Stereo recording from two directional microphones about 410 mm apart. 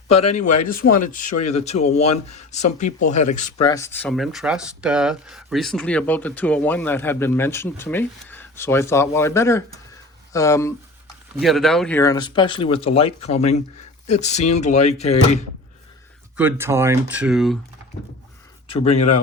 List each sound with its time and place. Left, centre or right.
0.3 s speech: centre
16.4 s speech: centre
18.7 s speech: centre